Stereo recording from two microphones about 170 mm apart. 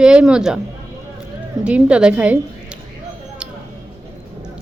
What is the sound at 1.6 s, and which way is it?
Speech, 5° right (ahead or behind).